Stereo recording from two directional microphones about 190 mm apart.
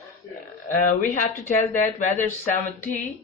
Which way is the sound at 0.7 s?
45° left (ahead or behind).